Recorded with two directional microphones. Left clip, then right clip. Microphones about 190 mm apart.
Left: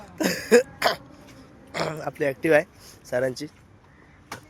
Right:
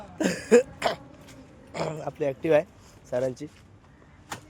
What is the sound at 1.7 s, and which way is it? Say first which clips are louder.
Speech: left 3 dB; 5° right (ahead or behind).